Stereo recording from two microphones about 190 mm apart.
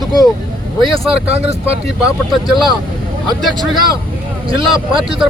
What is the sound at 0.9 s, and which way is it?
Speech, 30° right (ahead or behind).